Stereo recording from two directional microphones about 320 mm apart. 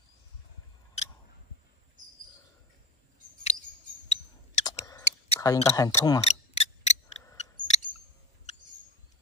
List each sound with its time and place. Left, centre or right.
4.1 s clicking: centre